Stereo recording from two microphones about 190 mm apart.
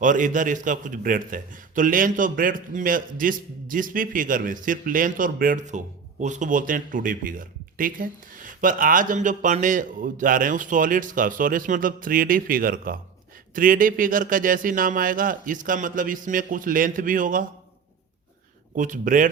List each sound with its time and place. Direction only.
0.0 s a man's voice: 45° right (ahead or behind)
18.8 s a man's voice: 45° right (ahead or behind)